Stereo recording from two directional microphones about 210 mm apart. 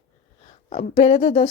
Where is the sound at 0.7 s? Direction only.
30° left (ahead or behind).